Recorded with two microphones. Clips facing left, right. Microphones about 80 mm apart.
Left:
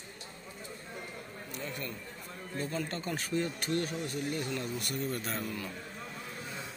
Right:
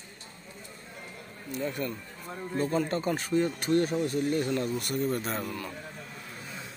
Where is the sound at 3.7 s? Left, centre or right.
Right.